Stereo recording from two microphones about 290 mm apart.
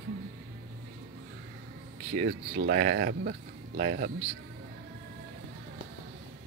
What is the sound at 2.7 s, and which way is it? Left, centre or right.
Speech, right.